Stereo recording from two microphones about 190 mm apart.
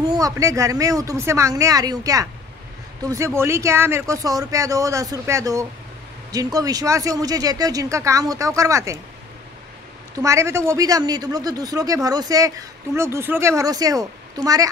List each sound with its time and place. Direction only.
0.0 s a man's voice: 20° right (ahead or behind)
10.1 s a man's voice: 15° right (ahead or behind)